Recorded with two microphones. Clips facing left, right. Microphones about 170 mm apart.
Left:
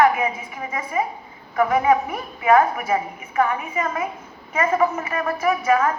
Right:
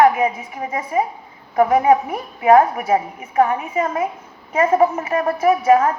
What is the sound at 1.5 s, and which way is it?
A woman's voice, 35° right (ahead or behind).